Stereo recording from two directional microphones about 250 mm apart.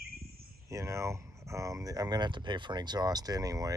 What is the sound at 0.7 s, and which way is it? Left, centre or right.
Speech, centre.